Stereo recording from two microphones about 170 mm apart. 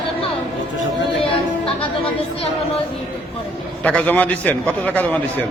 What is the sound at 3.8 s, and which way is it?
A man's voice, 10° left (ahead or behind).